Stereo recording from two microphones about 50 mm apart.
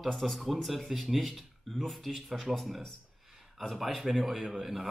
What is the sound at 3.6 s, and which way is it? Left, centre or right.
Speech, centre.